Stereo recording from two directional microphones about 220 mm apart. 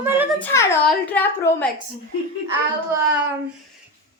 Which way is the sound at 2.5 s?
15° right (ahead or behind).